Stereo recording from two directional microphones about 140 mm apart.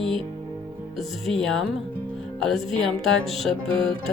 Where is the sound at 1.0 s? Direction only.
Centre (ahead or behind).